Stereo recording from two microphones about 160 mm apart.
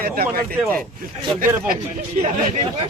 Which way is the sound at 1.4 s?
65° right (ahead or behind).